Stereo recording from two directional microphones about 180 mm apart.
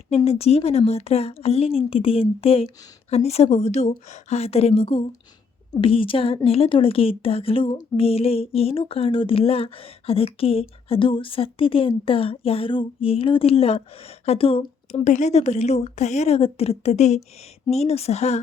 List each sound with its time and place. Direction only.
0.3 s speech: 35° left (ahead or behind)